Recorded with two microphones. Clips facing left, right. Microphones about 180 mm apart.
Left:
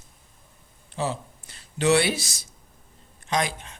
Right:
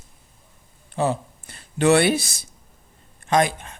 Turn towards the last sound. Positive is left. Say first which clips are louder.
# right 7 dB
turn(degrees=-55)  # may be behind; listen again after turning